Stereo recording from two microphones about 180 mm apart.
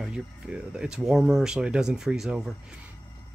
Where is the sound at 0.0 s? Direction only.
5° right (ahead or behind).